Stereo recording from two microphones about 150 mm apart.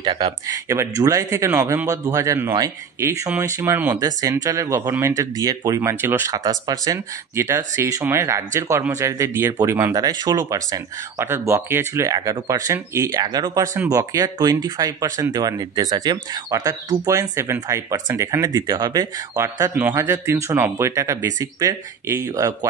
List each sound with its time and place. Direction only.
0.0 s speech: 25° right (ahead or behind)